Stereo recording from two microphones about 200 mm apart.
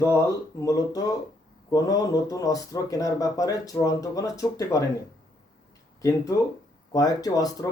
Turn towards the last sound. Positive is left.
turn(degrees=20)  # may be behind; listen again after turning